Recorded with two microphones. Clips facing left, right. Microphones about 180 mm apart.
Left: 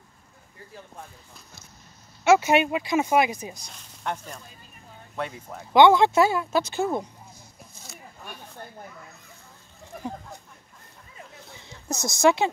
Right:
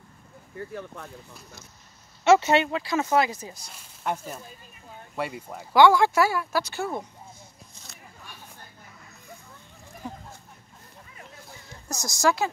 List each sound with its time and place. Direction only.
0.6 s speech: 65° right (ahead or behind)
2.2 s speech: 10° left (ahead or behind)
3.6 s speech: 5° right (ahead or behind)
5.7 s speech: 20° left (ahead or behind)
11.9 s speech: 25° left (ahead or behind)